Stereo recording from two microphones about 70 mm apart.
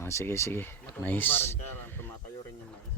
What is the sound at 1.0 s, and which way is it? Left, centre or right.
A man's voice, left.